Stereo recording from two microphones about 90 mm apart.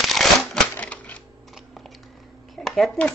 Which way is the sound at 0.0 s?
Centre (ahead or behind).